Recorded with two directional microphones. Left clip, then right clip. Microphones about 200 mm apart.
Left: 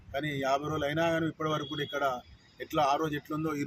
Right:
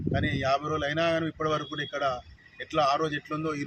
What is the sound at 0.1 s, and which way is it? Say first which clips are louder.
Speech: right 3 dB; 5° right (ahead or behind).